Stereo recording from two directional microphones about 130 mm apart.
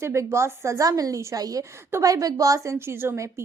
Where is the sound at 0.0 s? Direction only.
20° right (ahead or behind).